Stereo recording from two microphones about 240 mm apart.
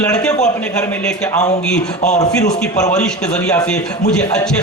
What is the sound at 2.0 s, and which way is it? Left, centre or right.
Speech, left.